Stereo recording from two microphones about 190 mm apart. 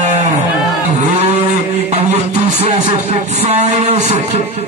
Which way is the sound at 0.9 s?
35° right (ahead or behind).